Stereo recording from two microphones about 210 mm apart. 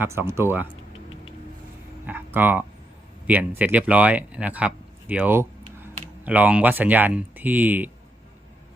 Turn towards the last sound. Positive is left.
turn(degrees=-10)  # may be behind; listen again after turning